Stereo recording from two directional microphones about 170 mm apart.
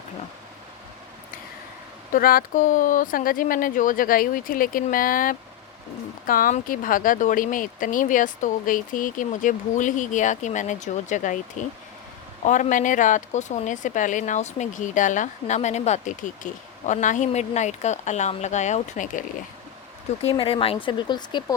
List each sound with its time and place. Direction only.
2.1 s speech: 55° left (ahead or behind)
20.2 s speech: 30° left (ahead or behind)